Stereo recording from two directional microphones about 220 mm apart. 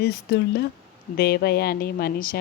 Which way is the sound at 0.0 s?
45° left (ahead or behind).